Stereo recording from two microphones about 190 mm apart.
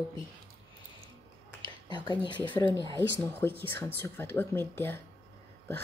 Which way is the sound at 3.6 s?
10° left (ahead or behind).